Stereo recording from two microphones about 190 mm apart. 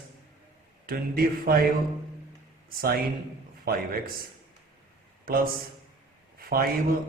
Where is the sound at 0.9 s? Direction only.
50° right (ahead or behind).